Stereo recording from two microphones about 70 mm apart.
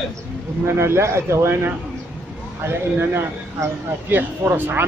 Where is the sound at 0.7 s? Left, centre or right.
Right.